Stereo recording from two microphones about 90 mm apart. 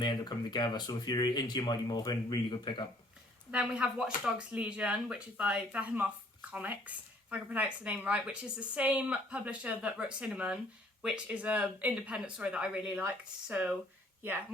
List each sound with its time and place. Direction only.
0.0 s speech: 55° left (ahead or behind)
3.5 s speech: 10° right (ahead or behind)
13.1 s speech: 20° right (ahead or behind)